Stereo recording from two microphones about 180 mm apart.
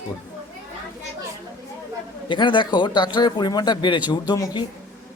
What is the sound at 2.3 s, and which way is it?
Speech, 25° left (ahead or behind).